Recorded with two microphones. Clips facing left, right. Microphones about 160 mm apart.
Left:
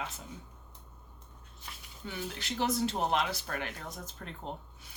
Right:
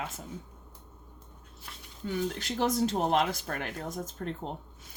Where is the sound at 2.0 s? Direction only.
45° right (ahead or behind).